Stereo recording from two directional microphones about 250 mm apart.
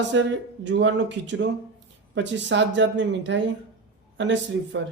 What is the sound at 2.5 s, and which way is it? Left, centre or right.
A woman's voice, right.